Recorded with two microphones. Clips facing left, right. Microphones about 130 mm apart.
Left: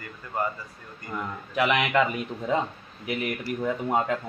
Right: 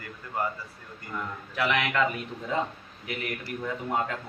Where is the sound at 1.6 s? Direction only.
20° left (ahead or behind).